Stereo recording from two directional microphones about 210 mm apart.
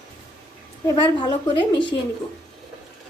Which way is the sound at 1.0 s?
20° left (ahead or behind).